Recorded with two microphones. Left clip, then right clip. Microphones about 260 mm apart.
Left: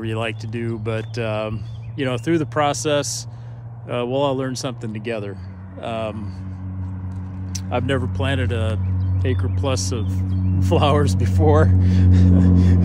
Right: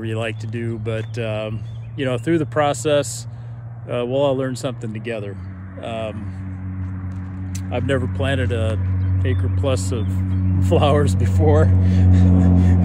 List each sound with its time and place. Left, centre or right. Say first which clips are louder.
0.0 s speech: even; centre
7.7 s speech: even; centre